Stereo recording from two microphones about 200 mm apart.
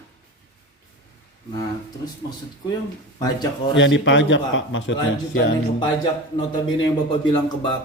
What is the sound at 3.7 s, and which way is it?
A man's voice, 65° left (ahead or behind).